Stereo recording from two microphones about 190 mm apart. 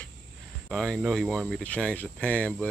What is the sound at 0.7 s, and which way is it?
Speech, centre (ahead or behind).